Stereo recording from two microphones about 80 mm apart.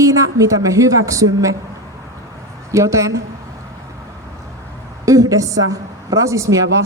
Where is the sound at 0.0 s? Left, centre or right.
Right.